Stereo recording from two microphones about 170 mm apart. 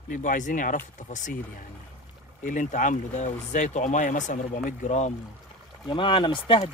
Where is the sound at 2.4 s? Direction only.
50° left (ahead or behind).